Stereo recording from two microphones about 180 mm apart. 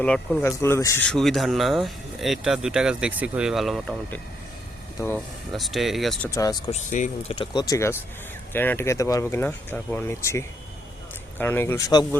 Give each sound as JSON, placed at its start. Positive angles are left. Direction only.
{"t": 0.0, "sound": "speech", "side_deg": 5}
{"t": 1.0, "sound": "speech", "side_deg": 0}
{"t": 5.5, "sound": "speech", "side_deg": 0}
{"t": 6.3, "sound": "speech", "side_deg": 20}
{"t": 6.7, "sound": "speech", "side_deg": 40}